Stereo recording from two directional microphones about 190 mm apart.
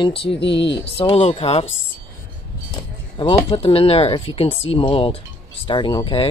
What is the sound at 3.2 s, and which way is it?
Speech, 25° left (ahead or behind).